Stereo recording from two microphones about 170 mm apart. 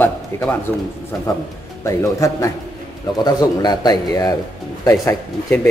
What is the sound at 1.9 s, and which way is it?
A man's voice, 20° left (ahead or behind).